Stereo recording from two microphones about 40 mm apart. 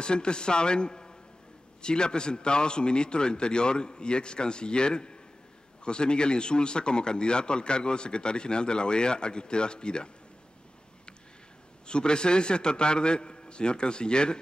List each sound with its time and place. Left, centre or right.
0.0 s speech: left
11.9 s speech: left